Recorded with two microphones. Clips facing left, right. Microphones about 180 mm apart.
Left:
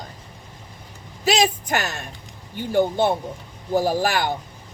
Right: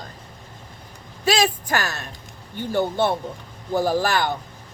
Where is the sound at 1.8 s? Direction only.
10° left (ahead or behind).